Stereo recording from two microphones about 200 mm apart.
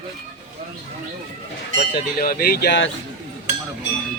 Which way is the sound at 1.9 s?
45° left (ahead or behind).